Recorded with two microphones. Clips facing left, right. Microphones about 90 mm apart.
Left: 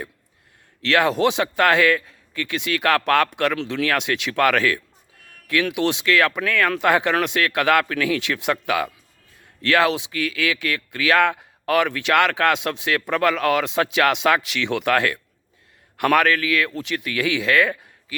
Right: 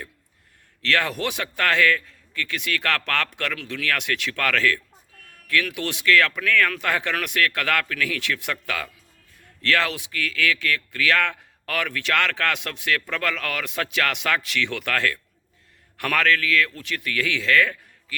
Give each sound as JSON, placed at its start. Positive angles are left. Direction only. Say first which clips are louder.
{"t": 0.8, "sound": "speech", "louder": "left 6 dB", "side_deg": 20}